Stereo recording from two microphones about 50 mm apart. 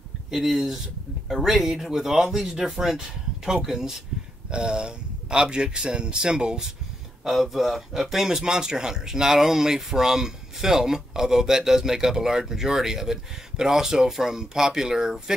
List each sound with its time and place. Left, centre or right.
0.3 s speech: centre
7.2 s speech: centre